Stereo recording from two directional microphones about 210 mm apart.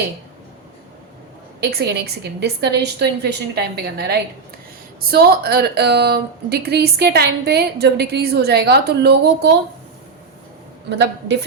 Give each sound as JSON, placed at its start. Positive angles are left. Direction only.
{"t": 1.6, "sound": "a woman's voice", "side_deg": -50}
{"t": 10.8, "sound": "a woman's voice", "side_deg": -55}